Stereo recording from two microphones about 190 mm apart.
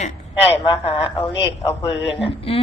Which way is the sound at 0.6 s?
25° left (ahead or behind).